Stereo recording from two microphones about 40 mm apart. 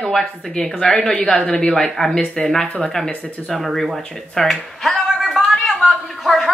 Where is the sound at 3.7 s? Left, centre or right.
Centre.